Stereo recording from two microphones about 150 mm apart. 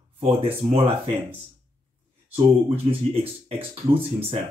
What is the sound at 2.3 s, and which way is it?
Speech, 40° right (ahead or behind).